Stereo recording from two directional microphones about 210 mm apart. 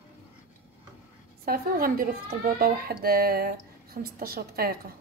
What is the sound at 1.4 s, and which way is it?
A woman's voice, 45° right (ahead or behind).